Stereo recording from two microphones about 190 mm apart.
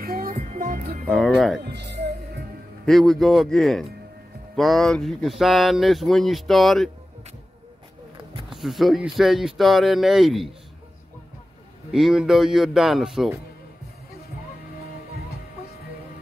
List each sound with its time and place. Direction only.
0.0 s music: 50° right (ahead or behind)
1.0 s speech: 5° left (ahead or behind)
1.6 s music: 60° right (ahead or behind)
2.8 s speech: centre (ahead or behind)
8.5 s speech: centre (ahead or behind)
11.9 s speech: 5° right (ahead or behind)